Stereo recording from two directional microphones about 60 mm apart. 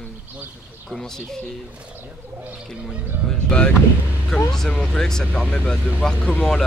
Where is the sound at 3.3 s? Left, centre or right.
Centre.